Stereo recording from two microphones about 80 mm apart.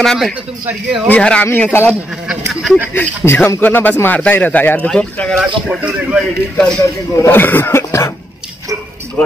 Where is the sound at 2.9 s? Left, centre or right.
Left.